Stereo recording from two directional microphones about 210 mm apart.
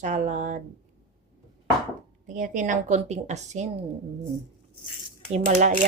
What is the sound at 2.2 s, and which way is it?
A woman's voice, 40° right (ahead or behind).